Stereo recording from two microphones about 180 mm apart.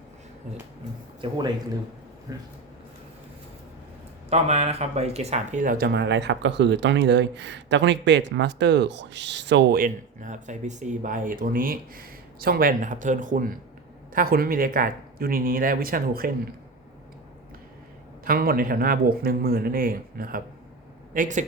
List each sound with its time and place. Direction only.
1.2 s speech: 25° right (ahead or behind)
4.3 s speech: 35° right (ahead or behind); by 16.3 s 55° right (ahead or behind)
18.3 s speech: 55° right (ahead or behind)